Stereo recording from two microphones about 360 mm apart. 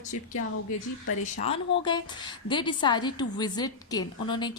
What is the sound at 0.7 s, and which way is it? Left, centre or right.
Speech, left.